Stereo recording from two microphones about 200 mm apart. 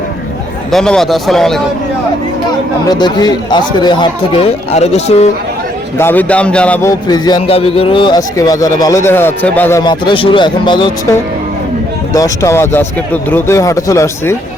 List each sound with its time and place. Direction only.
0.7 s a man's voice: centre (ahead or behind)
2.9 s speech: 20° left (ahead or behind)
6.0 s a man's voice: 10° left (ahead or behind)
7.1 s speech: 20° left (ahead or behind)
9.8 s a man's voice: 25° left (ahead or behind)